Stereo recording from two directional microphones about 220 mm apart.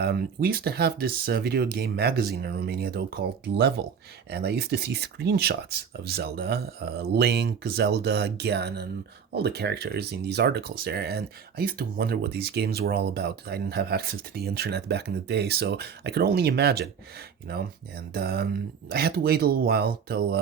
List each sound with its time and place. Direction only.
0.0 s speech: 45° right (ahead or behind)